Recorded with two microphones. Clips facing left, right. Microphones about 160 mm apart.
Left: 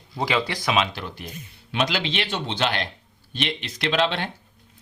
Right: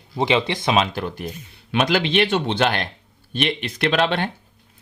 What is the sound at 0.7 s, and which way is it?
Speech, 45° right (ahead or behind).